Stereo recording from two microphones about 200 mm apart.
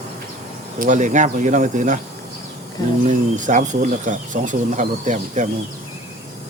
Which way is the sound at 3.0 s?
35° right (ahead or behind).